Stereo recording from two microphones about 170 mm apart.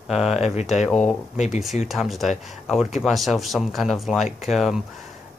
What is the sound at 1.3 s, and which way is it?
Speech, 45° left (ahead or behind).